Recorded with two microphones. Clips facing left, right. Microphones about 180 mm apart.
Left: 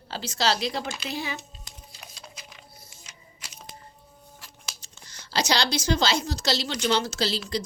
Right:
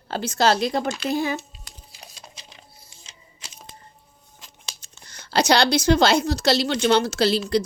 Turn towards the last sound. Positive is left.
turn(degrees=-60)  # may be behind; listen again after turning